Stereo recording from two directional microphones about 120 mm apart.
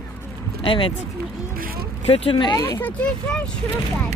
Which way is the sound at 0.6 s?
45° left (ahead or behind).